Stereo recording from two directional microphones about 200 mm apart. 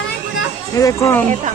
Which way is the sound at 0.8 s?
15° left (ahead or behind).